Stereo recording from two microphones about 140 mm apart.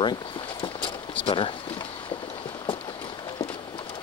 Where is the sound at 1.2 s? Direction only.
40° left (ahead or behind).